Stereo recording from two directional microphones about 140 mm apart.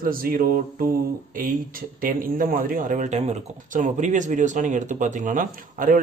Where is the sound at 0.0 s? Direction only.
90° right.